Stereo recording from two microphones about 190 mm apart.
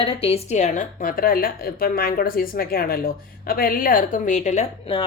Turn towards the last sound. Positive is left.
turn(degrees=30)  # may be behind; listen again after turning